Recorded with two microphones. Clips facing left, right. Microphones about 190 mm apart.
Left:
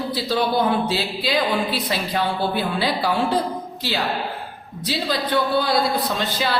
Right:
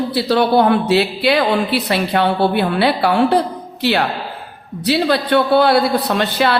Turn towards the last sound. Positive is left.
turn(degrees=-65)  # may be behind; listen again after turning